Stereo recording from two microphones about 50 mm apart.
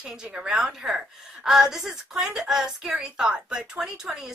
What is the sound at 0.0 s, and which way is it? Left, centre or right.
Speech, centre.